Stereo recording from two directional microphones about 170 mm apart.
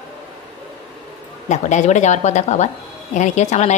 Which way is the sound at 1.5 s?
45° left (ahead or behind).